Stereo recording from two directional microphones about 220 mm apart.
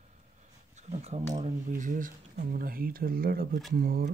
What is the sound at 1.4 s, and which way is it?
Speech, 35° right (ahead or behind).